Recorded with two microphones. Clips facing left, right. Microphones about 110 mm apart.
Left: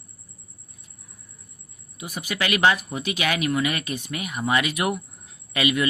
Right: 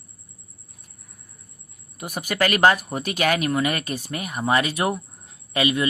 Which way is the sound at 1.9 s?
50° right (ahead or behind).